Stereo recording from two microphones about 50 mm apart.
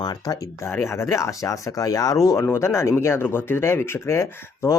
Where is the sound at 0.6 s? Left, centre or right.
Left.